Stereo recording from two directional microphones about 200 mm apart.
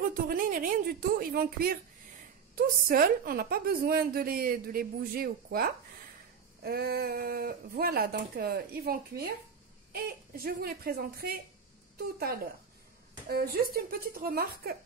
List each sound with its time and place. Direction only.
0.3 s a woman's voice: 45° right (ahead or behind)
13.3 s a woman's voice: 50° right (ahead or behind)